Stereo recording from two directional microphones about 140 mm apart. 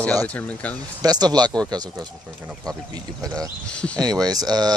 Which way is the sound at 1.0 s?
30° right (ahead or behind).